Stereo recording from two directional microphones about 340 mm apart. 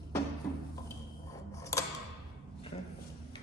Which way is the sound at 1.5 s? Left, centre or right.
Centre.